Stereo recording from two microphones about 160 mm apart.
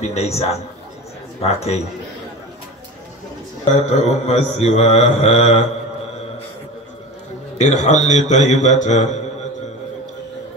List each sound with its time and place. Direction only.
0.0 s a man's voice: 40° left (ahead or behind)
3.8 s mantra: 45° left (ahead or behind)
7.5 s mantra: 50° left (ahead or behind)